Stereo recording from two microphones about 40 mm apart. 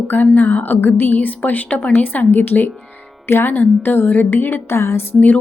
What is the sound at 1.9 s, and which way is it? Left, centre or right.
A woman's voice, left.